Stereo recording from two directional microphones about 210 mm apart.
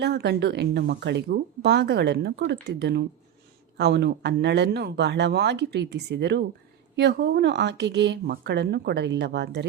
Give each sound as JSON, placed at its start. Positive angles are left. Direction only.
{"t": 0.0, "sound": "speech", "side_deg": -55}